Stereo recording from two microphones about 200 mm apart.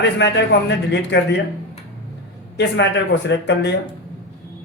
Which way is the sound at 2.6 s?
60° left (ahead or behind).